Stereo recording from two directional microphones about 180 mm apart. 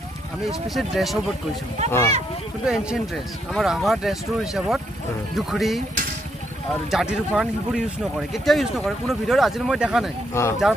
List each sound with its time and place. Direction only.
0.5 s speech: centre (ahead or behind)
1.9 s speech: 15° left (ahead or behind)
2.6 s speech: 5° right (ahead or behind)
6.9 s speech: 5° right (ahead or behind)
10.4 s speech: 15° left (ahead or behind)